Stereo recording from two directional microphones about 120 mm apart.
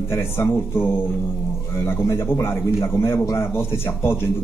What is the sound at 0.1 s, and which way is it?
Speech, 20° left (ahead or behind).